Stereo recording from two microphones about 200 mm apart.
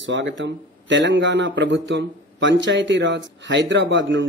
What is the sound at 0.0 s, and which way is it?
A man's voice, 65° right (ahead or behind).